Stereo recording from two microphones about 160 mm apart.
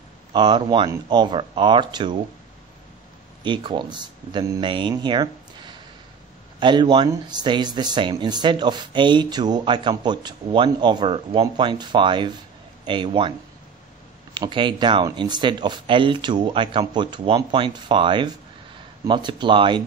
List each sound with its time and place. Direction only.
0.3 s speech: 30° right (ahead or behind)
3.4 s speech: 30° right (ahead or behind)
14.3 s speech: 30° right (ahead or behind)